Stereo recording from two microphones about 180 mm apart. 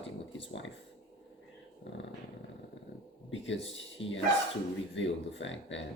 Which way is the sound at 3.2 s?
90° left.